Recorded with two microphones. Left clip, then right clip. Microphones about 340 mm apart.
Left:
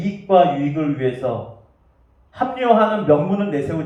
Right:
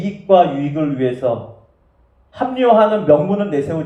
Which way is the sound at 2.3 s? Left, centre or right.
Right.